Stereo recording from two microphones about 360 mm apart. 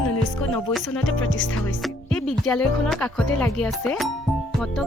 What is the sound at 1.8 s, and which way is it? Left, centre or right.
Speech, centre.